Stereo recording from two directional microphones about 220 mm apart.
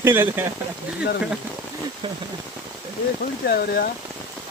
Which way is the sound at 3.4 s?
45° left (ahead or behind).